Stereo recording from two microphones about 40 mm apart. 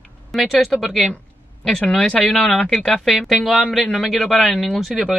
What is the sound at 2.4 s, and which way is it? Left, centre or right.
Speech, left.